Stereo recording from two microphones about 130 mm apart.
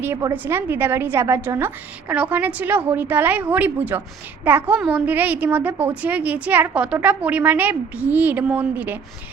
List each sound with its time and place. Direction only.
0.0 s a woman's voice: 20° right (ahead or behind)